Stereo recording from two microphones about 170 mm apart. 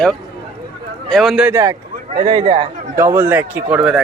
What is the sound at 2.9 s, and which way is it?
Speech, 15° right (ahead or behind).